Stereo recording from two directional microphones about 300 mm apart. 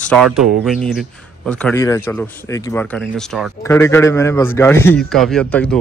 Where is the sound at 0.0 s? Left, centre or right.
Centre.